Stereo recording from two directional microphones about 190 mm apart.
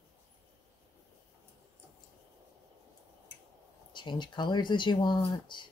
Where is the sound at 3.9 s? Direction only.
25° left (ahead or behind).